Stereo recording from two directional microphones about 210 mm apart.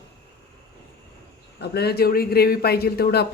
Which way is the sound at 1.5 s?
50° left (ahead or behind).